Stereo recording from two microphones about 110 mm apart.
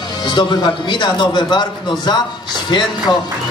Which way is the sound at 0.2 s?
45° left (ahead or behind).